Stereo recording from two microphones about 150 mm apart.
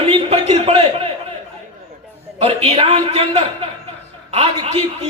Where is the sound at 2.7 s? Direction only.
40° right (ahead or behind).